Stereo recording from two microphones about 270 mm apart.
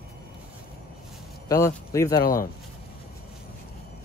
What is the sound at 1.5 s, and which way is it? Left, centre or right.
Speech, centre.